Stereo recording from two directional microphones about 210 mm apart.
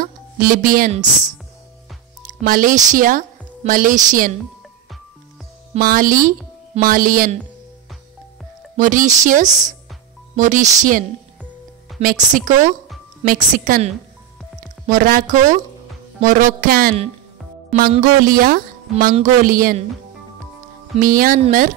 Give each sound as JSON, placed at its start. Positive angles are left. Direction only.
{"t": 0.0, "sound": "speech", "side_deg": -45}
{"t": 2.4, "sound": "a woman's voice", "side_deg": -40}
{"t": 5.8, "sound": "a woman's voice", "side_deg": -40}
{"t": 8.7, "sound": "a woman's voice", "side_deg": -35}
{"t": 14.9, "sound": "a woman's voice", "side_deg": -40}
{"t": 17.6, "sound": "music", "side_deg": -40}
{"t": 18.0, "sound": "a woman's voice", "side_deg": -40}
{"t": 20.9, "sound": "a woman's voice", "side_deg": -40}